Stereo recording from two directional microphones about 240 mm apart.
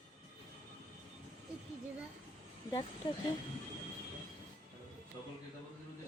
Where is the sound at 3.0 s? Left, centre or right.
Centre.